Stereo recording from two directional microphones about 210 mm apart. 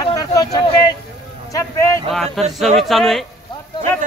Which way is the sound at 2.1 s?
Centre (ahead or behind).